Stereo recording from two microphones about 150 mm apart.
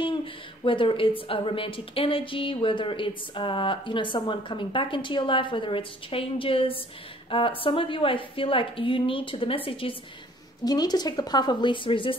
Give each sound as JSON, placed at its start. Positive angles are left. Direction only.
{"t": 0.0, "sound": "a woman's voice", "side_deg": 35}
{"t": 10.6, "sound": "a woman's voice", "side_deg": 25}